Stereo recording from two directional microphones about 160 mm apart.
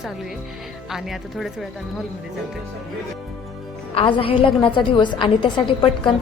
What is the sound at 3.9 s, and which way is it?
A woman's voice, 35° left (ahead or behind).